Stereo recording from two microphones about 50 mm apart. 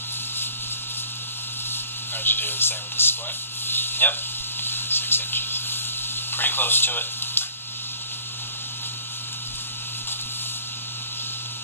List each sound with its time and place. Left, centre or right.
2.2 s speech: left
4.6 s a sound: left
6.3 s speech: left